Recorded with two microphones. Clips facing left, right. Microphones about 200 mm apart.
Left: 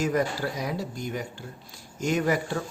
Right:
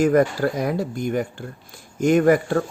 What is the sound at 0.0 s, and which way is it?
Speech, 55° right (ahead or behind).